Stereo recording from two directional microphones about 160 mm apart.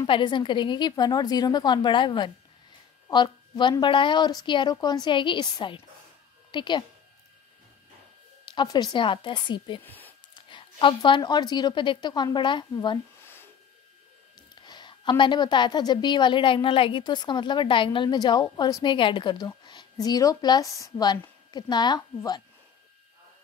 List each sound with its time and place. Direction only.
0.0 s a woman's voice: 30° left (ahead or behind)
8.5 s a woman's voice: 25° left (ahead or behind)
9.8 s a sound: 10° left (ahead or behind)
10.3 s a woman's voice: 30° left (ahead or behind)
13.2 s a sound: 15° left (ahead or behind)
14.5 s a woman's voice: 25° left (ahead or behind)